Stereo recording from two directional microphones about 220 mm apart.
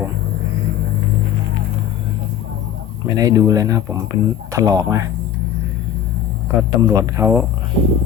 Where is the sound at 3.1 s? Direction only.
15° right (ahead or behind).